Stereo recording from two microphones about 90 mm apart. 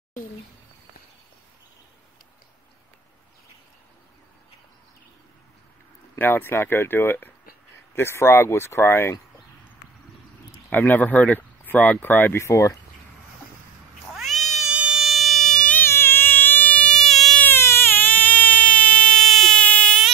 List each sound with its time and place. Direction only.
6.1 s speech: 25° left (ahead or behind)
10.7 s speech: 20° left (ahead or behind)
14.0 s cat: centre (ahead or behind)
14.7 s insect: 10° right (ahead or behind); by 15.8 s 10° left (ahead or behind)
15.8 s a sound: 25° left (ahead or behind); by 17.4 s 5° left (ahead or behind)
17.4 s frog: 25° left (ahead or behind)